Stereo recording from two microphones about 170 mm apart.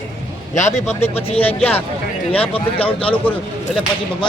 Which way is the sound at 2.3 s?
35° left (ahead or behind).